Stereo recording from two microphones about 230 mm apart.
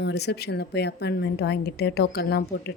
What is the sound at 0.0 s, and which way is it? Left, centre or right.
A woman's voice, left.